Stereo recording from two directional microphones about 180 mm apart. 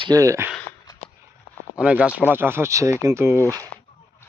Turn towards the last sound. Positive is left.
turn(degrees=-15)  # may be behind; listen again after turning